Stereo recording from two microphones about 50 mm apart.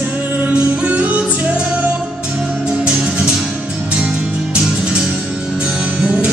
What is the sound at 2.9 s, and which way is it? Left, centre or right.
Music, centre.